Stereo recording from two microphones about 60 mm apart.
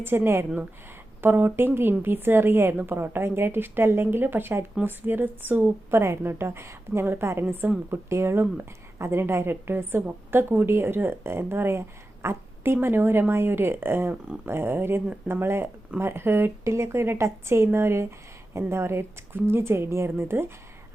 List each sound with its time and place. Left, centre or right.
0.1 s a woman's voice: right
7.9 s a woman's voice: right